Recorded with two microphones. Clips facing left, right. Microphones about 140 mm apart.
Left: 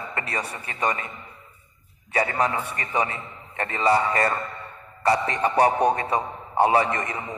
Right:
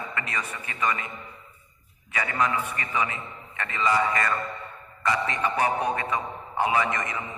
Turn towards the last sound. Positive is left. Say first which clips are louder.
# left 2 dB
turn(degrees=35)  # may be behind; listen again after turning